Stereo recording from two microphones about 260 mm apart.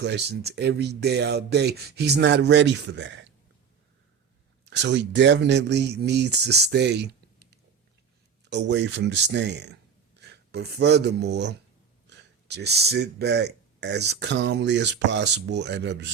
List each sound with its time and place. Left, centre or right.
0.0 s speech: right
4.7 s speech: right